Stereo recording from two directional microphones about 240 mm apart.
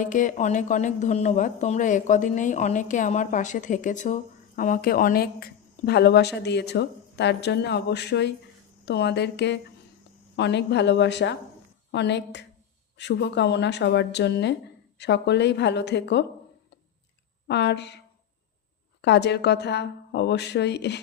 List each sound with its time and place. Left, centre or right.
0.0 s speech: left
17.5 s speech: left
19.0 s speech: left